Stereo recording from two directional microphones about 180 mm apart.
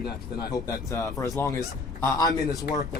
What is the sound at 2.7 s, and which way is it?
Speech, 60° left (ahead or behind).